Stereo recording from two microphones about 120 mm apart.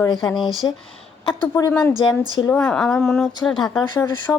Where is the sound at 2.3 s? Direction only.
25° left (ahead or behind).